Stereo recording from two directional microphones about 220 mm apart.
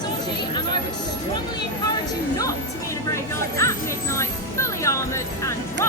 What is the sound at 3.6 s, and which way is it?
Music, 15° left (ahead or behind).